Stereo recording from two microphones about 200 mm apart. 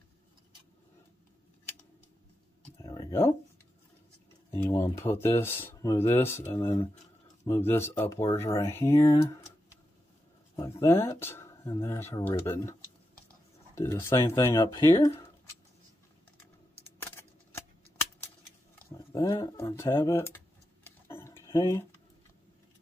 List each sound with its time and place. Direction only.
2.8 s a sound: 15° left (ahead or behind)
4.6 s speech: 15° left (ahead or behind)
10.5 s speech: 15° left (ahead or behind)
13.7 s speech: 15° left (ahead or behind)
19.1 s a sound: 20° left (ahead or behind)
21.5 s speech: 15° left (ahead or behind)